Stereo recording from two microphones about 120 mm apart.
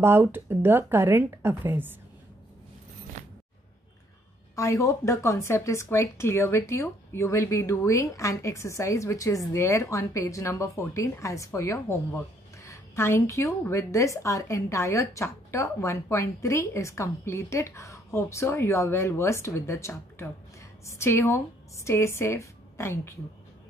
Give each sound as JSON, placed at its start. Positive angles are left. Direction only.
{"t": 0.0, "sound": "speech", "side_deg": -20}
{"t": 4.6, "sound": "a woman's voice", "side_deg": 25}